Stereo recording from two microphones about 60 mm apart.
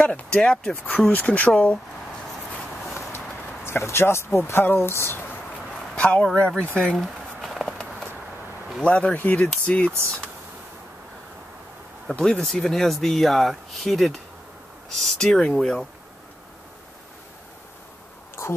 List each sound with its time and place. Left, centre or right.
0.0 s speech: centre
0.8 s speech: left
3.6 s speech: left
5.9 s speech: centre
7.0 s a sound: centre
7.6 s a sound: centre
8.8 s speech: centre
12.2 s speech: centre